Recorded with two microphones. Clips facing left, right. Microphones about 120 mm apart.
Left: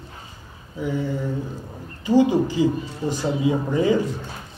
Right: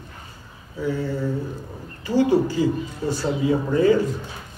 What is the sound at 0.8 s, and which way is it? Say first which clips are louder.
Speech: right 1 dB; 15° left (ahead or behind).